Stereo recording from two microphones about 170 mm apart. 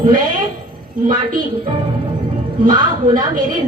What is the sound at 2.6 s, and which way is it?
Speech, 25° right (ahead or behind).